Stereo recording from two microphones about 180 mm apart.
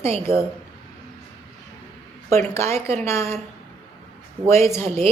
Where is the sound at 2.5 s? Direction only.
15° left (ahead or behind).